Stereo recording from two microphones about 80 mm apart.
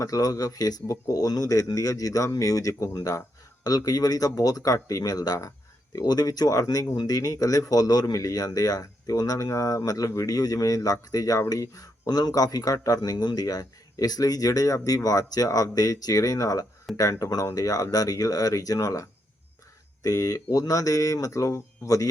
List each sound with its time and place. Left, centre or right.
0.0 s speech: left